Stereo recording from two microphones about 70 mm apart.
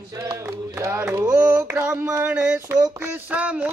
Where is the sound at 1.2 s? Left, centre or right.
Right.